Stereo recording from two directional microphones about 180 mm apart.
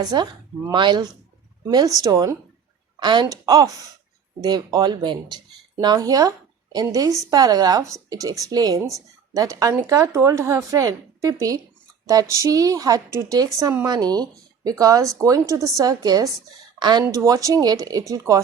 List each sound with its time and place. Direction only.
0.0 s speech: 20° right (ahead or behind)